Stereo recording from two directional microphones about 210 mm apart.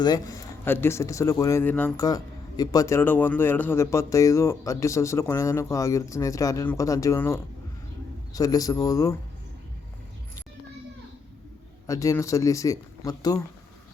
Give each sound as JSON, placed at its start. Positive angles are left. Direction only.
{"t": 0.0, "sound": "a man's voice", "side_deg": 20}
{"t": 11.9, "sound": "a man's voice", "side_deg": 15}